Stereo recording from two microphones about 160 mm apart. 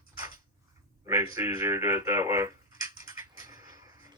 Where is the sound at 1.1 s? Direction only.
15° right (ahead or behind).